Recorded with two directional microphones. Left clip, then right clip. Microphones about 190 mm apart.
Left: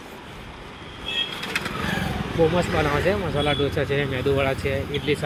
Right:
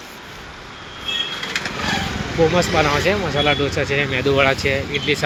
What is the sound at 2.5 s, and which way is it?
Speech, 10° left (ahead or behind).